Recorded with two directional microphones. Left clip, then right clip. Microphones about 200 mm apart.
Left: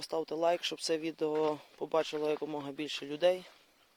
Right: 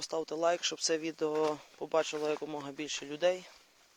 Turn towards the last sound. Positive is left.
turn(degrees=25)  # may be behind; listen again after turning